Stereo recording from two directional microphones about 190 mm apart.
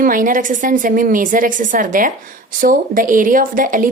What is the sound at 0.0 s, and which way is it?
A woman's voice, 45° right (ahead or behind).